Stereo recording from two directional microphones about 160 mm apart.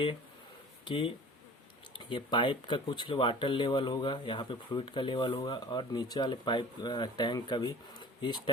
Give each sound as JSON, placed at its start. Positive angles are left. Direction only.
{"t": 0.9, "sound": "speech", "side_deg": 30}